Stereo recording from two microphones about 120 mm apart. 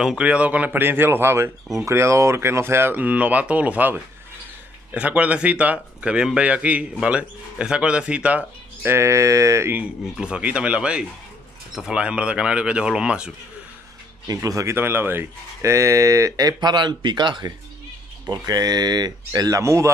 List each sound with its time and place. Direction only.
0.0 s speech: 10° right (ahead or behind)
10.1 s speech: 5° right (ahead or behind)
14.2 s speech: 30° right (ahead or behind)